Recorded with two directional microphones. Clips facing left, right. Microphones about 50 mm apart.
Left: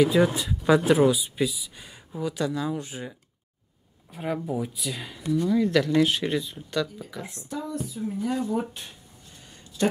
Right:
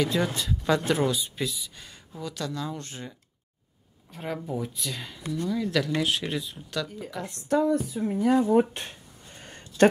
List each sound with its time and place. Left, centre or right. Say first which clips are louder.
0.0 s speech: left 6 dB; centre
7.3 s speech: right 10 dB; right
9.4 s a sound: right 8 dB; right